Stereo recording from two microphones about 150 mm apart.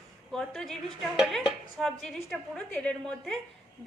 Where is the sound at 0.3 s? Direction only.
5° left (ahead or behind).